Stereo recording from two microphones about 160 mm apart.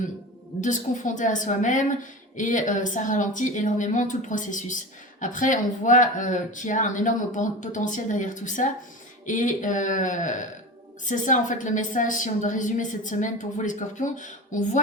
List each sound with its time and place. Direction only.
0.6 s a woman's voice: 55° left (ahead or behind)